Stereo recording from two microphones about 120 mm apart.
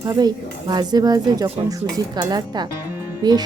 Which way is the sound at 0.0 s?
30° right (ahead or behind).